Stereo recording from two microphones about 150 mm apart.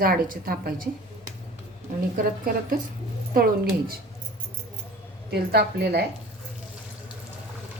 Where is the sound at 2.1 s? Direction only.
70° right (ahead or behind).